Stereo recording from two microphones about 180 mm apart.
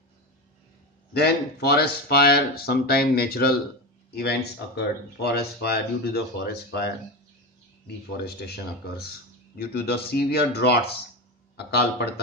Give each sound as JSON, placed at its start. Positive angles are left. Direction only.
{"t": 1.1, "sound": "speech", "side_deg": 60}
{"t": 8.5, "sound": "speech", "side_deg": 60}